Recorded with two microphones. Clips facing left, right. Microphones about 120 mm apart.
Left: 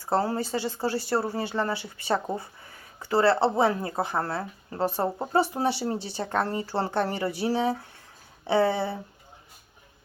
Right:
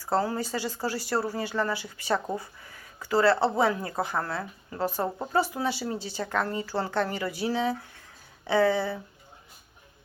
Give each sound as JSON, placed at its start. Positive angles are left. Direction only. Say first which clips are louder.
{"t": 0.0, "sound": "speech", "louder": "left 1 dB", "side_deg": 25}